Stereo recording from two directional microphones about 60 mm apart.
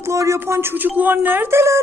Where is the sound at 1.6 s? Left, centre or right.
Right.